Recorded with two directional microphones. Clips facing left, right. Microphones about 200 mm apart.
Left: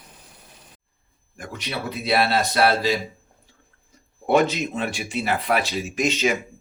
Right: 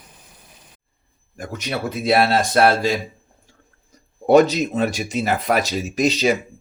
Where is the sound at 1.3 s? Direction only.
45° right (ahead or behind).